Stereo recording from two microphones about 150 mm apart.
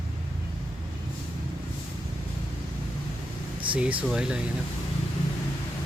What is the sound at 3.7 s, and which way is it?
Speech, 10° right (ahead or behind).